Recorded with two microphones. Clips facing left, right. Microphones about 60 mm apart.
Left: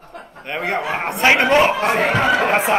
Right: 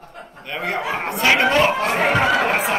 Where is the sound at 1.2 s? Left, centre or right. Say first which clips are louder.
Left 2 dB; left.